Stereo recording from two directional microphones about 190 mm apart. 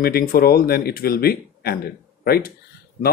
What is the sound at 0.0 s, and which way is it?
Speech, 50° left (ahead or behind).